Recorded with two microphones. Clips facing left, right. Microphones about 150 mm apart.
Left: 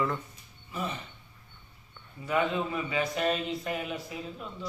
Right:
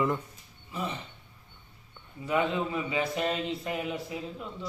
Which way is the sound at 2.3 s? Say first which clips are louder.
Even; 20° right (ahead or behind).